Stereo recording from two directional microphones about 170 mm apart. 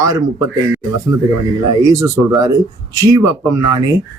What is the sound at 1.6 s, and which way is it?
Speech, 20° right (ahead or behind).